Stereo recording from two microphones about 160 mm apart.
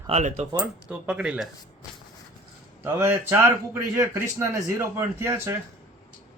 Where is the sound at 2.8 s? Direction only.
15° right (ahead or behind).